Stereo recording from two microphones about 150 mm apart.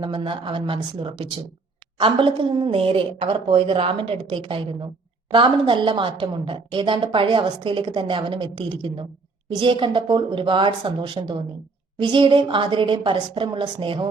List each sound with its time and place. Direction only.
0.0 s a woman's voice: 35° right (ahead or behind)